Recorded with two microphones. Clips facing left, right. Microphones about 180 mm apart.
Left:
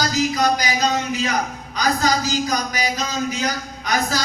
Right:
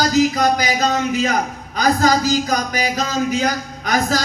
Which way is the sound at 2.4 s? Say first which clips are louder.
Right 3 dB; 55° right (ahead or behind).